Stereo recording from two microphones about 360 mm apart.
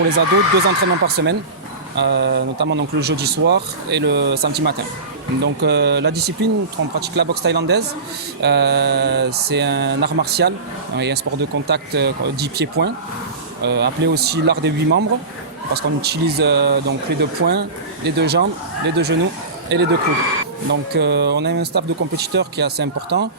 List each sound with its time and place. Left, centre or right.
0.2 s speech: right